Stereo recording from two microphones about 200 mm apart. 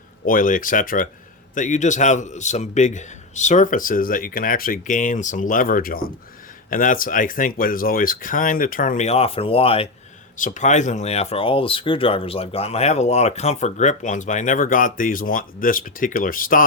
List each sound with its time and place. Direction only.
0.3 s speech: 40° left (ahead or behind)